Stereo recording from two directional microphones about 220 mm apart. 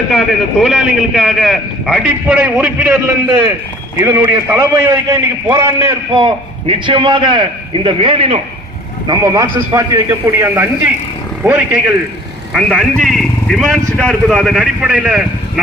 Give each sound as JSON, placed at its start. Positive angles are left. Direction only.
{"t": 0.6, "sound": "a man's voice", "side_deg": 0}